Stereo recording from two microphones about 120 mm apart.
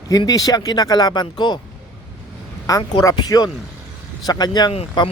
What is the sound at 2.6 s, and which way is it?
Speech, 30° left (ahead or behind).